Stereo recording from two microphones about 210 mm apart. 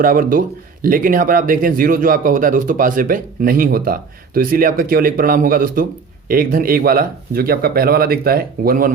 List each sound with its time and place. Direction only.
0.0 s speech: 40° right (ahead or behind)